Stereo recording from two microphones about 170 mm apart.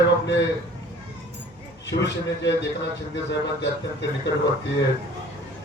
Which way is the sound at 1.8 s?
90° left.